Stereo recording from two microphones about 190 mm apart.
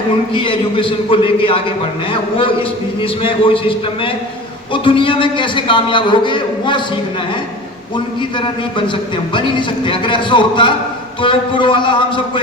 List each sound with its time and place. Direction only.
0.3 s a man's voice: 25° left (ahead or behind)
3.0 s a man's voice: 25° left (ahead or behind)
9.3 s a man's voice: 25° left (ahead or behind)